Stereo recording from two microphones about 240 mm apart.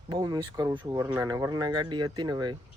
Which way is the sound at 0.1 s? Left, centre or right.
Centre.